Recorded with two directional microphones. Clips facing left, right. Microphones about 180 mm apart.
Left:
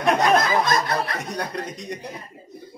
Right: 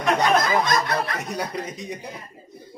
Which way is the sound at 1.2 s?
5° right (ahead or behind).